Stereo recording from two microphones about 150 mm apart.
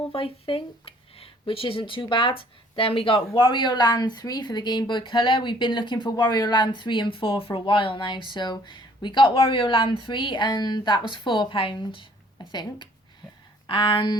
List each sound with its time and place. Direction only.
0.1 s speech: 35° left (ahead or behind)